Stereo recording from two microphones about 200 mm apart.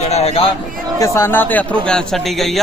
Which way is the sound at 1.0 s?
15° left (ahead or behind).